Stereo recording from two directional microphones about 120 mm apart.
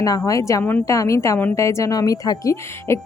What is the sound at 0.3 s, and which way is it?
Speech, 30° left (ahead or behind).